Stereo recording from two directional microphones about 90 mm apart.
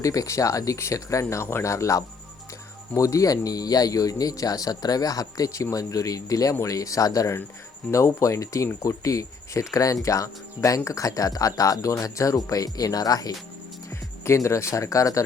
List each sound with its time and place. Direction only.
0.0 s speech: 40° left (ahead or behind)
14.3 s speech: 35° left (ahead or behind)